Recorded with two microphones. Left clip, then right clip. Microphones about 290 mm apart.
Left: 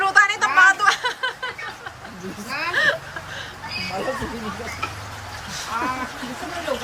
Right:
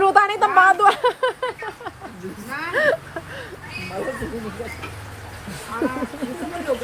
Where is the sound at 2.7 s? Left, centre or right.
Centre.